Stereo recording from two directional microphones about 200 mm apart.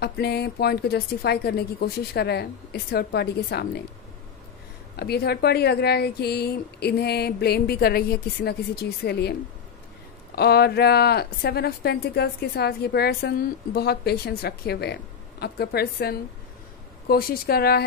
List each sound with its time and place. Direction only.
0.0 s speech: 55° left (ahead or behind)
4.9 s a woman's voice: 50° left (ahead or behind)
10.3 s speech: 50° left (ahead or behind)